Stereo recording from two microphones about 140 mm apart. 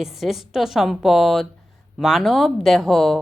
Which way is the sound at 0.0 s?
Centre (ahead or behind).